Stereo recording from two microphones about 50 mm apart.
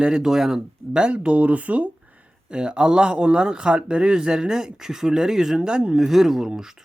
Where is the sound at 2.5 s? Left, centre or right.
Centre.